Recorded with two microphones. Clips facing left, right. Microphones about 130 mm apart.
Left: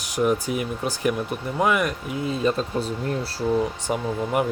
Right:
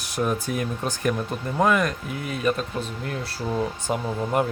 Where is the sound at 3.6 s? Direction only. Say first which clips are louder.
Left 1 dB; 15° left (ahead or behind).